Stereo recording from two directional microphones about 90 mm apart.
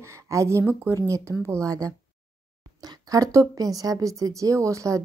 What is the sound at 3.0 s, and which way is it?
Speech, 40° right (ahead or behind).